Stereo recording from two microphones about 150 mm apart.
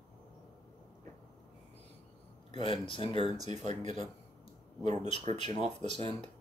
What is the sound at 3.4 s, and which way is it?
Speech, 50° right (ahead or behind).